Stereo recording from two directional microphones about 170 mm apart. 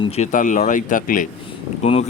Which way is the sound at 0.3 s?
50° left (ahead or behind).